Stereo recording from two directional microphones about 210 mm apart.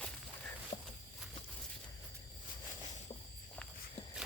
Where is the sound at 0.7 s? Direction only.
30° left (ahead or behind).